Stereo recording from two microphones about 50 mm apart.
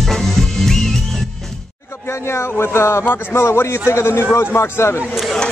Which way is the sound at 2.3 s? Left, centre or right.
Left.